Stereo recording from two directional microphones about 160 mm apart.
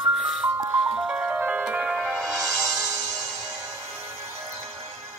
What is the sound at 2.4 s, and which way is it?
Music, 20° right (ahead or behind).